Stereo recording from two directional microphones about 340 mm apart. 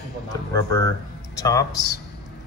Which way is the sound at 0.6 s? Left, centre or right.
Centre.